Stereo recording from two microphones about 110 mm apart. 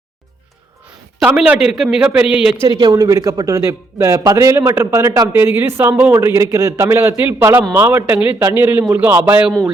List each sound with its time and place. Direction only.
1.5 s a man's voice: 5° right (ahead or behind)
2.6 s speech: 40° right (ahead or behind)
5.3 s a man's voice: 20° right (ahead or behind)